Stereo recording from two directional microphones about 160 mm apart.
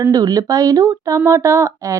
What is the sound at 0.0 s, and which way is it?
Speech, 25° right (ahead or behind).